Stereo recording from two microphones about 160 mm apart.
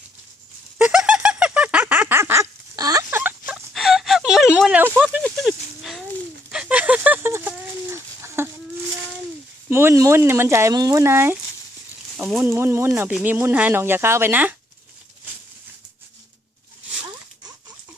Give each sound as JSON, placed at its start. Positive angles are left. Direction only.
{"t": 0.8, "sound": "a sound", "side_deg": -10}
{"t": 5.2, "sound": "livestock", "side_deg": 0}
{"t": 6.5, "sound": "chicken", "side_deg": -5}
{"t": 9.6, "sound": "speech", "side_deg": -15}
{"t": 12.4, "sound": "speech", "side_deg": -15}